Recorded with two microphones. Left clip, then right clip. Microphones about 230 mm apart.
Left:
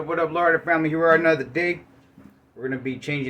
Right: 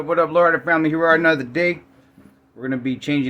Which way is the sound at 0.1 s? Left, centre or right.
Right.